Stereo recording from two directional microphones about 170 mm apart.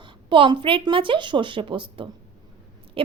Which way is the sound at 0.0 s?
30° right (ahead or behind).